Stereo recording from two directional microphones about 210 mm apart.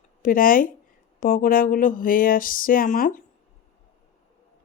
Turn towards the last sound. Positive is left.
turn(degrees=40)  # may be behind; listen again after turning